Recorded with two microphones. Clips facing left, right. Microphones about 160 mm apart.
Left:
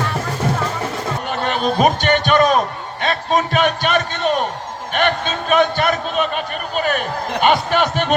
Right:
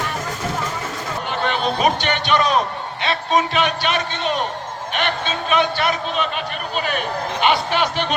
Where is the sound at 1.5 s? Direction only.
45° left (ahead or behind).